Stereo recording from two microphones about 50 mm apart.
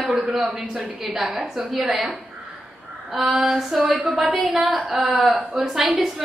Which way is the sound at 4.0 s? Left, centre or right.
Right.